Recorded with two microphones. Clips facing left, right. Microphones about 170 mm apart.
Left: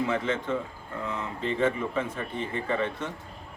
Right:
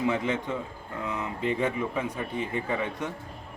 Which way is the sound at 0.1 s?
15° right (ahead or behind).